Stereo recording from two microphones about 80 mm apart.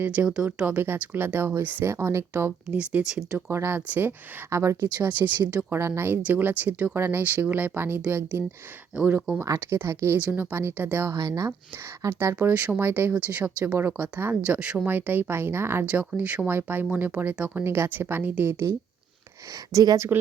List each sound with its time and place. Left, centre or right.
0.0 s speech: right
0.3 s speech: centre; by 2.5 s right
2.6 s speech: centre
3.3 s speech: right
4.4 s speech: right
4.9 s speech: right
9.4 s speech: right
11.1 s speech: right
12.0 s speech: right
12.4 s speech: right
14.4 s speech: centre; by 15.9 s right
15.9 s speech: centre
17.6 s speech: right
19.7 s speech: right